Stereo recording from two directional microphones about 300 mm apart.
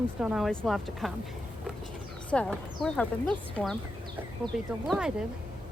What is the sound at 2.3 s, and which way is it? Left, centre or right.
Speech, centre.